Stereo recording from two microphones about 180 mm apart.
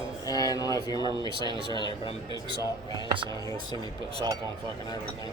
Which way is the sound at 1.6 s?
25° left (ahead or behind).